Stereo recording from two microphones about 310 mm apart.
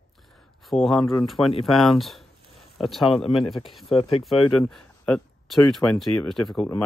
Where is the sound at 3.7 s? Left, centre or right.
Centre.